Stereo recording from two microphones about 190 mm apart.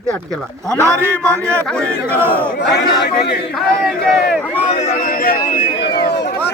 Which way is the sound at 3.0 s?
60° left (ahead or behind).